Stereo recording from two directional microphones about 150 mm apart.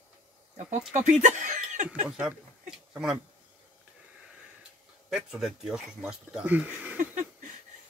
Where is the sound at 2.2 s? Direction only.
5° right (ahead or behind).